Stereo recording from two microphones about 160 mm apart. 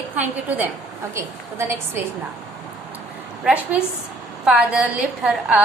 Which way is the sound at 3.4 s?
10° right (ahead or behind).